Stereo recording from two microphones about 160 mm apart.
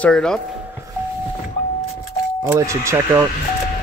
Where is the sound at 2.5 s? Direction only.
15° right (ahead or behind).